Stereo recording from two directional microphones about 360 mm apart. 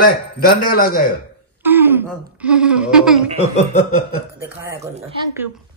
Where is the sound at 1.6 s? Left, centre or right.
Centre.